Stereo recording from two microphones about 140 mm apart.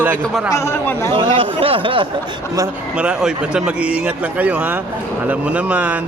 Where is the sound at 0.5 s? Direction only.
15° left (ahead or behind).